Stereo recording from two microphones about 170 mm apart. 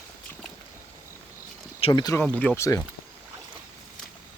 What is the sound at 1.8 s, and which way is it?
Speech, 25° left (ahead or behind).